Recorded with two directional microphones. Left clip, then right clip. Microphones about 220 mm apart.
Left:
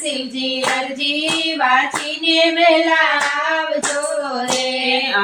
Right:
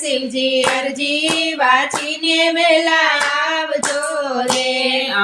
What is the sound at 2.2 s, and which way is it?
Child singing, 35° right (ahead or behind).